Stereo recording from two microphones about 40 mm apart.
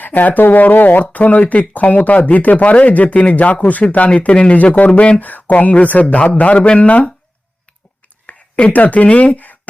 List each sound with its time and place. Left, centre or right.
0.0 s speech: left
4.9 s speech: left
5.2 s speech: left
8.3 s whispering: left
8.7 s speech: left
9.3 s speech: left